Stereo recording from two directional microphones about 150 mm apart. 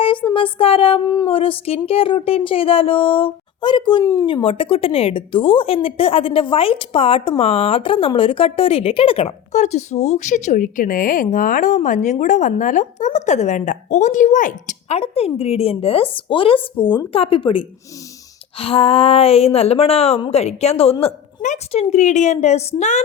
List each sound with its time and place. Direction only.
0.3 s a woman's voice: 35° left (ahead or behind)
4.0 s speech: 20° left (ahead or behind)
4.3 s a woman's voice: 35° left (ahead or behind); by 23.0 s 50° left (ahead or behind)